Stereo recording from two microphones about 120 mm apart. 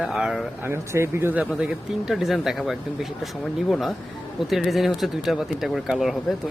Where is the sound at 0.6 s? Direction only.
20° right (ahead or behind).